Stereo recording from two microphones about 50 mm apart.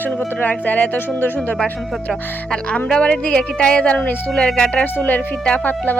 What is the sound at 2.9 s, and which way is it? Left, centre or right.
Speech, centre.